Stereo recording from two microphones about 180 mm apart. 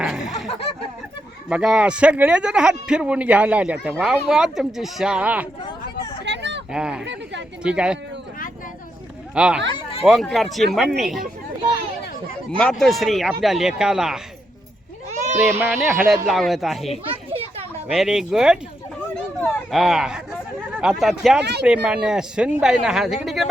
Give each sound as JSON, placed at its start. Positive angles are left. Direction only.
{"t": 0.0, "sound": "a sound", "side_deg": -5}
{"t": 1.5, "sound": "speech", "side_deg": -5}
{"t": 6.2, "sound": "a sound", "side_deg": -75}
{"t": 6.7, "sound": "speech", "side_deg": -5}
{"t": 7.0, "sound": "speech", "side_deg": -75}
{"t": 7.6, "sound": "speech", "side_deg": -5}
{"t": 9.3, "sound": "speech", "side_deg": -5}
{"t": 12.5, "sound": "speech", "side_deg": 5}
{"t": 15.5, "sound": "speech", "side_deg": -10}
{"t": 17.3, "sound": "children playing", "side_deg": -35}
{"t": 17.8, "sound": "speech", "side_deg": 0}